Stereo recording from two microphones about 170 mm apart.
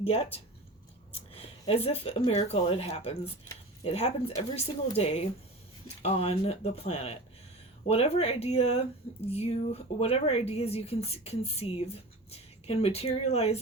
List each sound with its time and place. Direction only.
0.0 s speech: 35° left (ahead or behind)